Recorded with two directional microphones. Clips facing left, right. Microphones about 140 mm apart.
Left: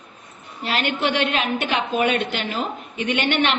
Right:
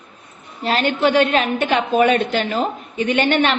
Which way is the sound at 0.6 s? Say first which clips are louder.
Right 5 dB; 40° right (ahead or behind).